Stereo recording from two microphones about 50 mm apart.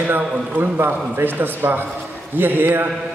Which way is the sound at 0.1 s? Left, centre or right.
Right.